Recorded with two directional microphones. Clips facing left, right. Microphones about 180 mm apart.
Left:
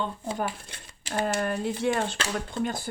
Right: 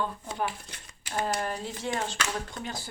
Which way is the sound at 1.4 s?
55° left (ahead or behind).